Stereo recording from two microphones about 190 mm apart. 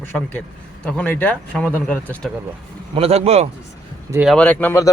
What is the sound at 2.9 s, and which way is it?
Speech, 30° right (ahead or behind).